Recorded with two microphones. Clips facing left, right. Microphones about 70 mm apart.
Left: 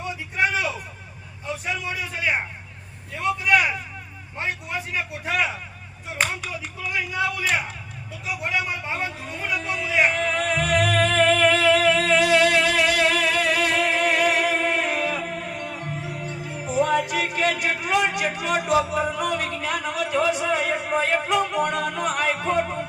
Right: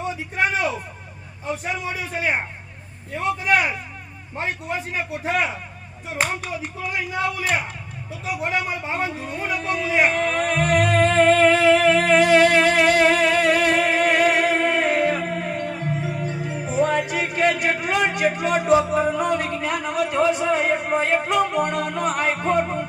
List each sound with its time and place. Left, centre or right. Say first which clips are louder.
0.0 s a sound: right 1 dB; right
4.4 s a man's voice: right 2 dB; right
6.4 s speech: right 3 dB; right
9.0 s a man's voice: right 4 dB; right
9.3 s music: right 1 dB; right
19.7 s a sound: right 2 dB; right
21.2 s music: right 2 dB; right